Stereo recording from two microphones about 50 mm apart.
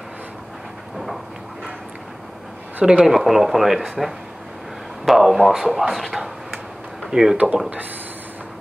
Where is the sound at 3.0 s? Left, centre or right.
Centre.